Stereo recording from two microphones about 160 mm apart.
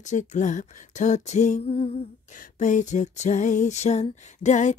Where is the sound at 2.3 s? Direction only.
55° left (ahead or behind).